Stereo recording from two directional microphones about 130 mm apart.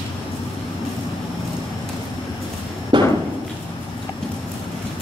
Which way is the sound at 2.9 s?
35° right (ahead or behind).